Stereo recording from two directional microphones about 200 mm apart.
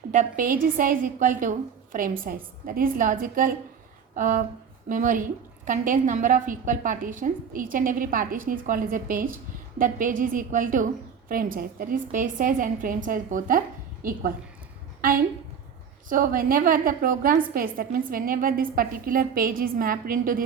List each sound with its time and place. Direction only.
0.1 s a woman's voice: 40° right (ahead or behind)
16.0 s a woman's voice: 45° right (ahead or behind)